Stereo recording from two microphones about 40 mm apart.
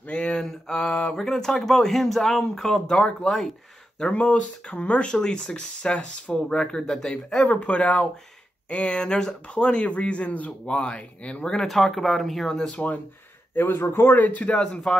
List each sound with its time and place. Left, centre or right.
0.3 s a sound: centre
1.1 s speech: centre
2.9 s speech: left
4.1 s speech: left
7.4 s speech: left
11.6 s speech: centre
12.7 s speech: left
13.6 s a man's voice: left
14.2 s a man's voice: left
14.5 s speech: left